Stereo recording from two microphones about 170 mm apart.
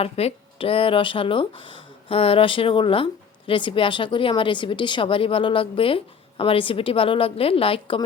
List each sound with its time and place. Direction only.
0.0 s speech: 35° left (ahead or behind)